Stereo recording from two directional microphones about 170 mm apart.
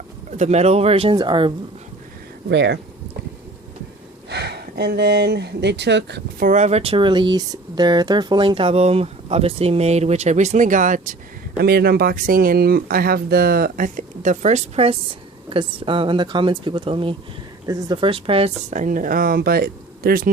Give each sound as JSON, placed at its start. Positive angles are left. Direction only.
{"t": 0.3, "sound": "speech", "side_deg": -40}
{"t": 2.5, "sound": "speech", "side_deg": -90}
{"t": 4.3, "sound": "speech", "side_deg": -75}
{"t": 6.4, "sound": "speech", "side_deg": -45}
{"t": 11.6, "sound": "speech", "side_deg": -65}